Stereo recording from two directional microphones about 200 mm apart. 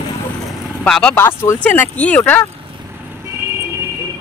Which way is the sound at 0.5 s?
Centre (ahead or behind).